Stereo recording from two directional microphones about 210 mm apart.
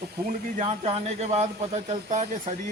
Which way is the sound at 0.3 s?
35° right (ahead or behind).